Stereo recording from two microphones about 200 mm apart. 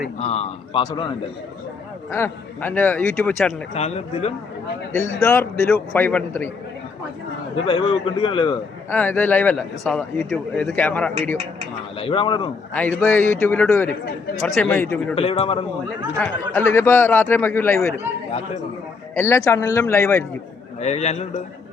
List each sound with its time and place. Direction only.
0.2 s a man's voice: 30° left (ahead or behind)
2.0 s speech: 10° left (ahead or behind)
3.8 s a man's voice: 30° left (ahead or behind)
5.2 s speech: 15° left (ahead or behind)
7.6 s a man's voice: 25° left (ahead or behind)
8.9 s speech: 10° left (ahead or behind)
11.9 s a man's voice: 25° left (ahead or behind)
12.7 s speech: 10° left (ahead or behind)
15.1 s a man's voice: 30° left (ahead or behind)
16.1 s speech: 5° left (ahead or behind)
19.1 s speech: 15° left (ahead or behind)
20.8 s a man's voice: 35° left (ahead or behind)